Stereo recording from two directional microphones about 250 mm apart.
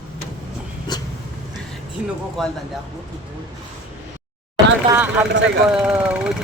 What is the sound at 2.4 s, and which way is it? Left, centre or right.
Speech, centre.